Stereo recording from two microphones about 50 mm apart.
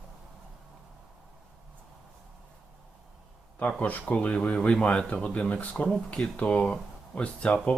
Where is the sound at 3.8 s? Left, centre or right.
Left.